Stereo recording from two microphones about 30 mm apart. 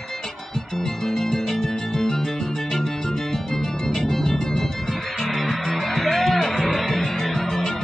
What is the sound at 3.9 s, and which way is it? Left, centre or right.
Music, centre.